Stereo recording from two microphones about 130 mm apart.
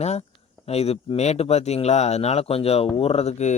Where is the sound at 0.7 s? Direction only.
50° left (ahead or behind).